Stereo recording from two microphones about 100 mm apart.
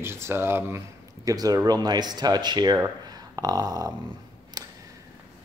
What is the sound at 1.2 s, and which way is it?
Speech, 40° right (ahead or behind).